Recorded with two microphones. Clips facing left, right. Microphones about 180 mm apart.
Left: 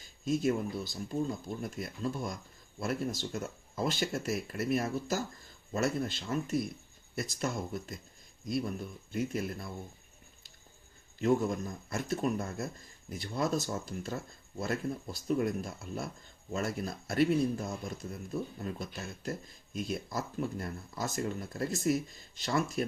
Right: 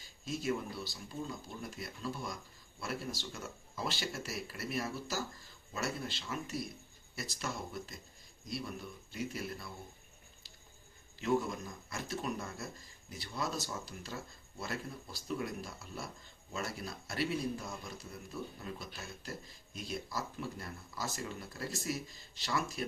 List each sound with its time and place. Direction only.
0.3 s speech: 50° left (ahead or behind)
9.1 s speech: 50° left (ahead or behind)
11.2 s speech: 50° left (ahead or behind)